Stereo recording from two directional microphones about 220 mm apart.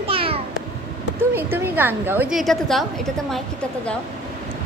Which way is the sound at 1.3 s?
10° right (ahead or behind).